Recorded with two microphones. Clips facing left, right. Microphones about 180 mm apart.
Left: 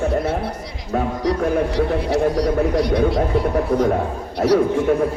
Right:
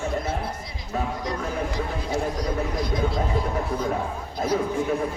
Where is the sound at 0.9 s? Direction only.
65° left (ahead or behind).